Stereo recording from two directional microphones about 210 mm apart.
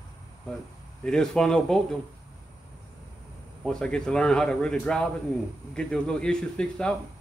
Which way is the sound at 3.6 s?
5° left (ahead or behind).